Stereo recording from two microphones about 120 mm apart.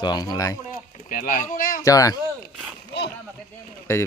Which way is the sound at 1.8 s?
30° left (ahead or behind).